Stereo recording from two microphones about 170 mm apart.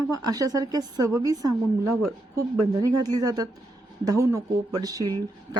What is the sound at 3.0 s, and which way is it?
Speech, 20° right (ahead or behind).